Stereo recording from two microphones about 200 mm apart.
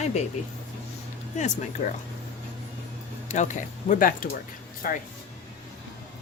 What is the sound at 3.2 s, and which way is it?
Speech, 35° left (ahead or behind).